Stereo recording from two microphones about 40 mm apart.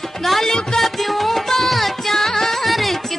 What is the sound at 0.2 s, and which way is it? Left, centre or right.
Music, centre.